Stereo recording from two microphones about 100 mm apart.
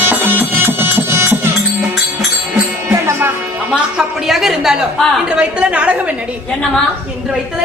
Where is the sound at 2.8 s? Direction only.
30° right (ahead or behind).